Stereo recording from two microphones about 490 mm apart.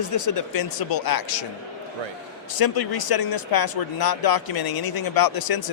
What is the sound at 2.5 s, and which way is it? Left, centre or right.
Speech, left.